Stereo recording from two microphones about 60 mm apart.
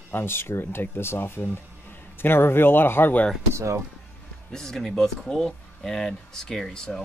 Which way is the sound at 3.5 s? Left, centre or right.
Right.